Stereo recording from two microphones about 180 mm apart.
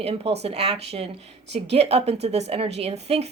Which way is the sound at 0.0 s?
35° right (ahead or behind).